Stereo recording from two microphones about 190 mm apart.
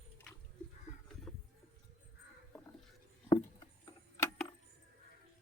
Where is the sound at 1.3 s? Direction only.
Centre (ahead or behind).